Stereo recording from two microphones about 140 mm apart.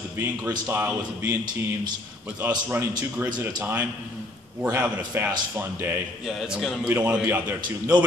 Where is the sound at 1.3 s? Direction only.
30° right (ahead or behind).